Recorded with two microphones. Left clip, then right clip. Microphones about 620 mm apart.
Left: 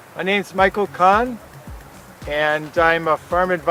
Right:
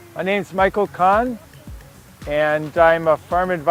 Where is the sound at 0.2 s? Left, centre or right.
Right.